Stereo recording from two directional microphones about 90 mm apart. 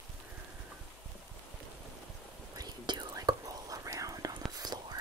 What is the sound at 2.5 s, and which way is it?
Whispering, 55° right (ahead or behind).